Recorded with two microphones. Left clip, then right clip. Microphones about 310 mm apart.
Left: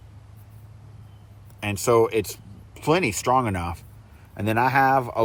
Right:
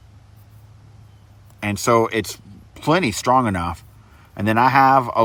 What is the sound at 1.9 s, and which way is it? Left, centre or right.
Speech, right.